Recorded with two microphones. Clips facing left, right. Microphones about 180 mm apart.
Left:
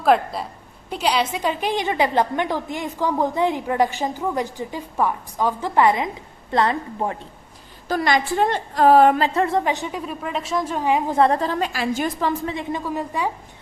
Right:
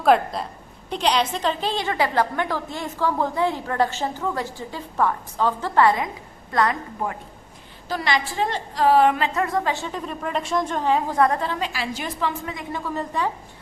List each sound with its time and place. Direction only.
0.0 s a woman's voice: centre (ahead or behind); by 7.2 s 30° left (ahead or behind)
7.9 s a woman's voice: 50° left (ahead or behind); by 11.3 s 25° left (ahead or behind)
11.3 s a woman's voice: 45° left (ahead or behind)
12.5 s a woman's voice: 25° left (ahead or behind)
12.8 s a woman's voice: 10° left (ahead or behind)